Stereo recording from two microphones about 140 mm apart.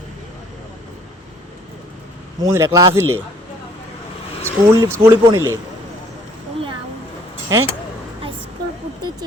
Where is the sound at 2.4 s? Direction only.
20° right (ahead or behind).